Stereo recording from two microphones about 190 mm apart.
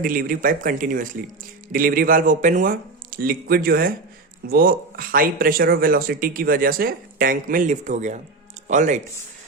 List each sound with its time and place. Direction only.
0.0 s speech: 45° right (ahead or behind)